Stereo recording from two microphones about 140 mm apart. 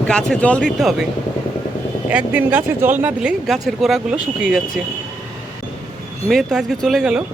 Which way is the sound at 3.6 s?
Centre (ahead or behind).